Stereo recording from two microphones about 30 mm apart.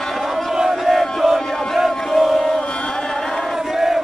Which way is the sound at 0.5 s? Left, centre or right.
Centre.